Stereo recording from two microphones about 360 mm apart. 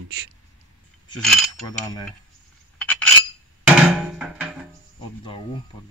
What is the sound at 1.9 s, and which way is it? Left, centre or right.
Speech, centre.